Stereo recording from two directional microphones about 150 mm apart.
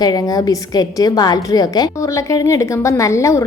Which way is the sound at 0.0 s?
25° left (ahead or behind).